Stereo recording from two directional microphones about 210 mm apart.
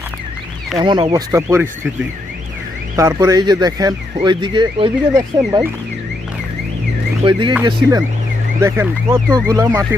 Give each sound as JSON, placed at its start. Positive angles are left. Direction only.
{"t": 0.8, "sound": "speech", "side_deg": -20}
{"t": 2.9, "sound": "speech", "side_deg": -15}
{"t": 7.3, "sound": "speech", "side_deg": -25}